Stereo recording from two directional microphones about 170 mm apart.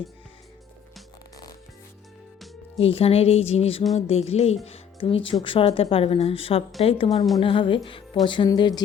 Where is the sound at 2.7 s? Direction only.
35° left (ahead or behind).